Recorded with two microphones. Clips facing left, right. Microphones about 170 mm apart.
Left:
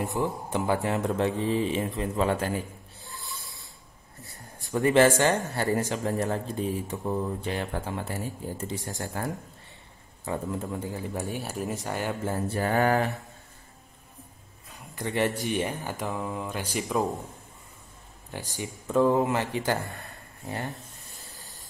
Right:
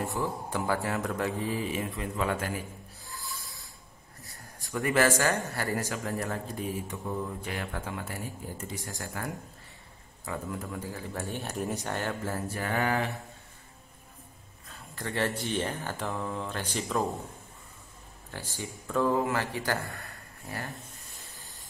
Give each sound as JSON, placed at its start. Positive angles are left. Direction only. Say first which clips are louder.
{"t": 0.0, "sound": "a man's voice", "louder": "left 3 dB", "side_deg": 20}
{"t": 4.2, "sound": "a man's voice", "louder": "left 4 dB", "side_deg": 20}
{"t": 11.2, "sound": "speech", "louder": "left 1 dB", "side_deg": 5}
{"t": 12.0, "sound": "speech", "louder": "left 3 dB", "side_deg": 15}
{"t": 12.5, "sound": "mantra", "louder": "left 6 dB", "side_deg": 40}
{"t": 14.7, "sound": "a sound", "louder": "left 4 dB", "side_deg": 15}
{"t": 15.4, "sound": "speech", "louder": "left 3 dB", "side_deg": 15}
{"t": 18.3, "sound": "a man's voice", "louder": "left 3 dB", "side_deg": 15}